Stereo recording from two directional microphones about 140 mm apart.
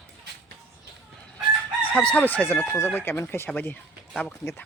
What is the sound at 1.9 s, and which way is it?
Speech, 10° left (ahead or behind).